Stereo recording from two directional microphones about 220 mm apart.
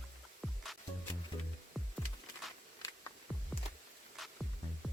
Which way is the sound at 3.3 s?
5° right (ahead or behind).